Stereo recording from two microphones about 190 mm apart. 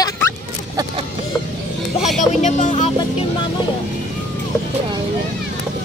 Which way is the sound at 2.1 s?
40° left (ahead or behind).